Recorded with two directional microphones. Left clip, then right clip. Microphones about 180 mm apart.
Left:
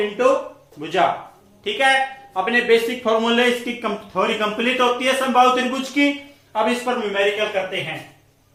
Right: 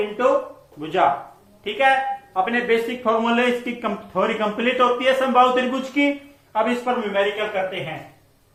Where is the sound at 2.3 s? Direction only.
15° left (ahead or behind).